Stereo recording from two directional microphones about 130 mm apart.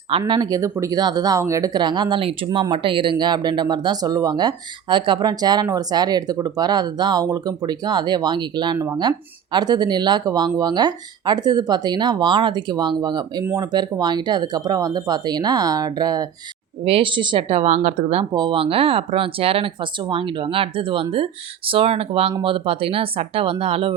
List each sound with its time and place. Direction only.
0.1 s speech: 35° right (ahead or behind)
16.8 s speech: 45° right (ahead or behind)
18.3 s speech: 35° right (ahead or behind)